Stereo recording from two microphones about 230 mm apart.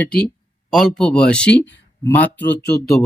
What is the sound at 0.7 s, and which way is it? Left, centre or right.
Speech, centre.